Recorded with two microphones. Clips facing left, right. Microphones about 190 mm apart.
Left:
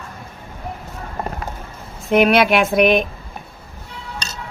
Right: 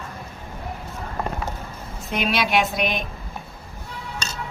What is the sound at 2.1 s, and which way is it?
Speech, 55° left (ahead or behind).